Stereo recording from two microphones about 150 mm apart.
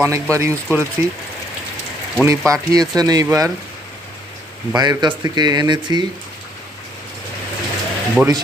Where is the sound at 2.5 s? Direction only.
25° right (ahead or behind).